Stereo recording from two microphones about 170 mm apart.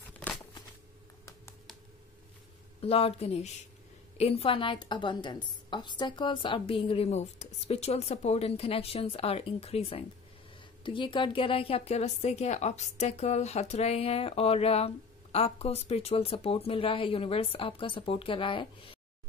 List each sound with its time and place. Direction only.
2.8 s a woman's voice: 35° left (ahead or behind)